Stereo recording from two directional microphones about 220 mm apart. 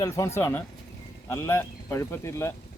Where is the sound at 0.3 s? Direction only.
10° left (ahead or behind).